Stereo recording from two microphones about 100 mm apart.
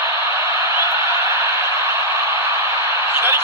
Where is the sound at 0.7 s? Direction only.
30° right (ahead or behind).